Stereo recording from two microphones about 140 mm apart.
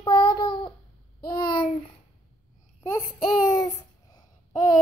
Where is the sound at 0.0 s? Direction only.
35° left (ahead or behind).